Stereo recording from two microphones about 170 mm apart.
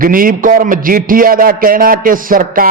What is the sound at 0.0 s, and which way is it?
A man's voice, 55° right (ahead or behind).